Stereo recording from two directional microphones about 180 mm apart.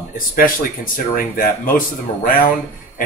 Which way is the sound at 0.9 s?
50° left (ahead or behind).